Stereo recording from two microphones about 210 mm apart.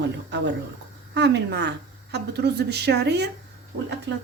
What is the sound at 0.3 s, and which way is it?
A woman's voice, 55° right (ahead or behind).